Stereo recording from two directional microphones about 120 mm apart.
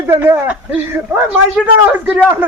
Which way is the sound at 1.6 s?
15° right (ahead or behind).